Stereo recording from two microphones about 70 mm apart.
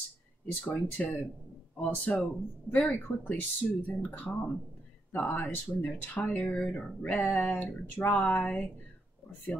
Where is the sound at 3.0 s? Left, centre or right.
Left.